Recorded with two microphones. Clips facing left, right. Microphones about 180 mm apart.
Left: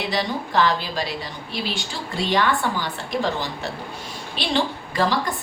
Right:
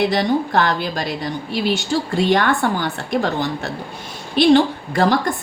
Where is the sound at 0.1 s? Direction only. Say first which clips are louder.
Right 6 dB; 50° right (ahead or behind).